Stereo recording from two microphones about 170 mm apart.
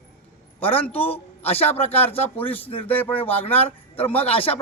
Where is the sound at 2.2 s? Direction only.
10° left (ahead or behind).